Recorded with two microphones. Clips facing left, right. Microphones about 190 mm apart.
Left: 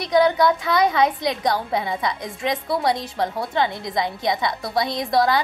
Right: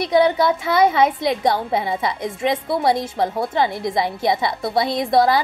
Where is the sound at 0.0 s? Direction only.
25° right (ahead or behind).